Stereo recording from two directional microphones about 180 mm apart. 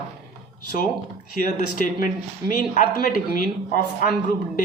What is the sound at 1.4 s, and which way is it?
Speech, 45° left (ahead or behind).